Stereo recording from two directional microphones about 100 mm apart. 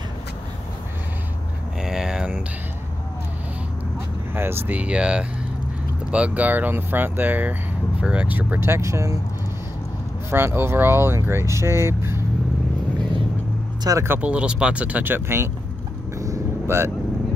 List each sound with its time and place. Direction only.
1.8 s a sound: 5° right (ahead or behind)
4.4 s speech: 20° right (ahead or behind)
10.3 s speech: 25° right (ahead or behind)
14.0 s speech: 15° right (ahead or behind)
16.2 s vehicle: 30° right (ahead or behind)